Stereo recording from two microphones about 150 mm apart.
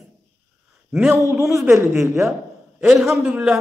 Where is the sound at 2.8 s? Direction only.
5° right (ahead or behind).